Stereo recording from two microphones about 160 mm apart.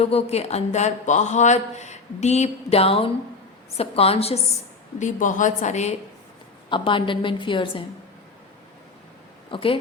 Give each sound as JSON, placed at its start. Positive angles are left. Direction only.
{"t": 0.0, "sound": "a woman's voice", "side_deg": 40}
{"t": 4.9, "sound": "speech", "side_deg": 50}
{"t": 6.7, "sound": "a woman's voice", "side_deg": 30}
{"t": 9.5, "sound": "a woman's voice", "side_deg": 35}